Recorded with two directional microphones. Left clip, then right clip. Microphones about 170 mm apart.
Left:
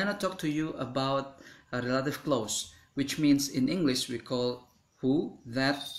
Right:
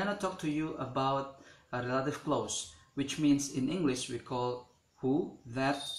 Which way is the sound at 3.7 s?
25° left (ahead or behind).